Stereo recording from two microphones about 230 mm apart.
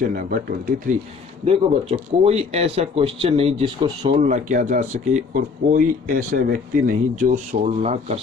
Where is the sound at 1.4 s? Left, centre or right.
Right.